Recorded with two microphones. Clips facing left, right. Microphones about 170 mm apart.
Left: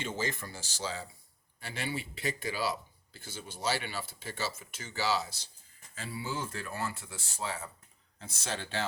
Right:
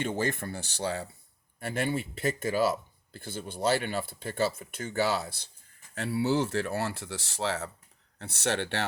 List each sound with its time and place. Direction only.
0.0 s speech: 55° right (ahead or behind); by 7.7 s 90° right
8.2 s speech: 70° right (ahead or behind)